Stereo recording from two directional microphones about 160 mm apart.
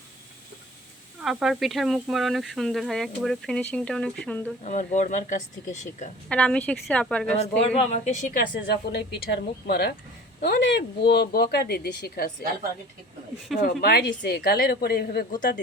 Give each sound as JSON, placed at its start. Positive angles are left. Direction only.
{"t": 1.2, "sound": "speech", "side_deg": -5}
{"t": 4.6, "sound": "speech", "side_deg": 50}
{"t": 6.2, "sound": "a woman's voice", "side_deg": 5}
{"t": 7.8, "sound": "a woman's voice", "side_deg": 45}
{"t": 13.5, "sound": "speech", "side_deg": 0}
{"t": 13.8, "sound": "speech", "side_deg": 85}